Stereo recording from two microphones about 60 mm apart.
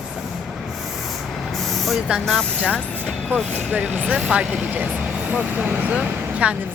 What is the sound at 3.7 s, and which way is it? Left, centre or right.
Speech, right.